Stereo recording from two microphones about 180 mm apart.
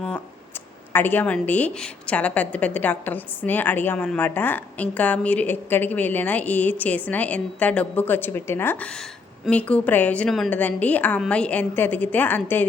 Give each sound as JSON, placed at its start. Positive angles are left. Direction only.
{"t": 0.9, "sound": "a woman's voice", "side_deg": 10}